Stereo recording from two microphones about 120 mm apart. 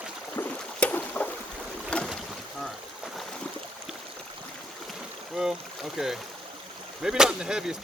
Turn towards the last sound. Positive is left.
turn(degrees=-5)  # may be behind; listen again after turning